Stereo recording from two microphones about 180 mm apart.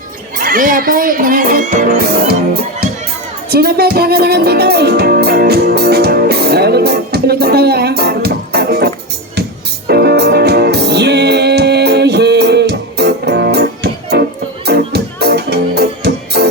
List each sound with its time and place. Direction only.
0.3 s speech: 50° right (ahead or behind)
3.5 s music: 60° right (ahead or behind)